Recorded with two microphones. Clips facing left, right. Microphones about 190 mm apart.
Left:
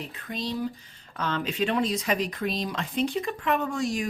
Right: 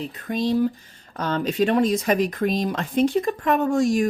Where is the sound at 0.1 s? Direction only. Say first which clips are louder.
Right 12 dB; 50° right (ahead or behind).